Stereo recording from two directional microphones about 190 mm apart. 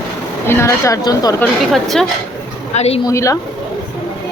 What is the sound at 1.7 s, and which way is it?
Speech, centre (ahead or behind).